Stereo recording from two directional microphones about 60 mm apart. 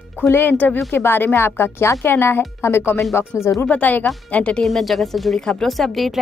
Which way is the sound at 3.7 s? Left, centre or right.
Left.